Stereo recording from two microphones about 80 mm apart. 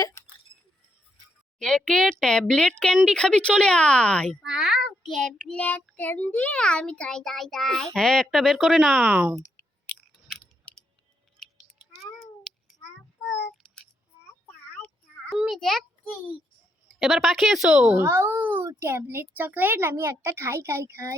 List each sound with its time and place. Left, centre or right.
1.5 s speech: centre
4.4 s a child's voice: centre
5.4 s a child's voice: centre
9.0 s a child's voice: right
9.9 s chewing: centre
10.7 s clicking: centre
11.4 s cat: centre
15.3 s a child's voice: centre
16.9 s a child's voice: centre
17.9 s a child's voice: right